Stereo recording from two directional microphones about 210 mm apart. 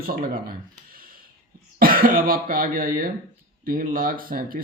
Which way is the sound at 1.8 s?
45° right (ahead or behind).